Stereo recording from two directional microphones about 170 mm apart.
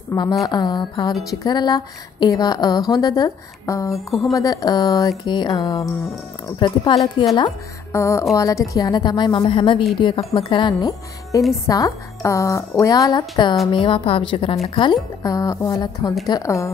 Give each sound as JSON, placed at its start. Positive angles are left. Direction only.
{"t": 0.1, "sound": "a woman's voice", "side_deg": 20}